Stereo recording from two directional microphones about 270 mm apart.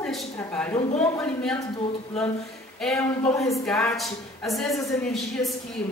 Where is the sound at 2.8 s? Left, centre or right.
Centre.